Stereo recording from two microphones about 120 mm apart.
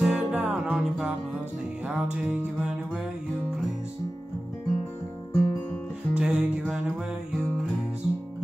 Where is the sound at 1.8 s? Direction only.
10° right (ahead or behind).